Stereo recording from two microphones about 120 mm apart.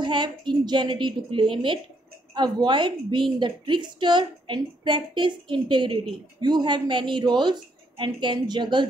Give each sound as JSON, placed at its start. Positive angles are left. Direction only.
{"t": 0.0, "sound": "a woman's voice", "side_deg": -40}